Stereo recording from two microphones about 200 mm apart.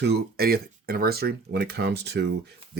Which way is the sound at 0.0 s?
50° right (ahead or behind).